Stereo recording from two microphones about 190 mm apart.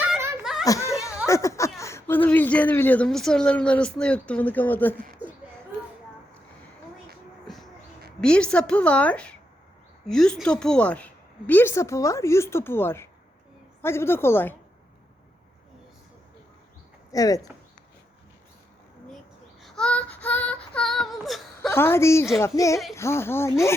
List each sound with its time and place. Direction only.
0.6 s a sound: 15° left (ahead or behind)
1.3 s speech: 15° left (ahead or behind)
7.4 s music: centre (ahead or behind)
8.2 s a woman's voice: 5° left (ahead or behind)
17.1 s speech: 20° left (ahead or behind)
19.6 s child singing: 5° left (ahead or behind)
21.7 s a woman's voice: 10° left (ahead or behind)